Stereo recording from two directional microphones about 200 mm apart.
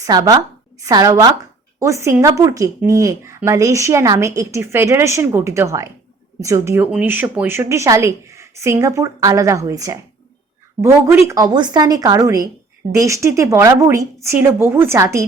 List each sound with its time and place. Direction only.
0.0 s a woman's voice: 20° right (ahead or behind)